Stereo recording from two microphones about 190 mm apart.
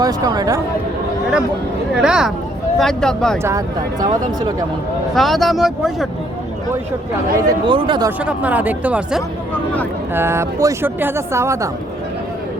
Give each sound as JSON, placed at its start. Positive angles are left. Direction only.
{"t": 0.0, "sound": "speech", "side_deg": -20}
{"t": 2.0, "sound": "speech", "side_deg": -5}
{"t": 5.1, "sound": "speech", "side_deg": 0}
{"t": 7.4, "sound": "speech", "side_deg": -25}
{"t": 8.2, "sound": "a woman's voice", "side_deg": -5}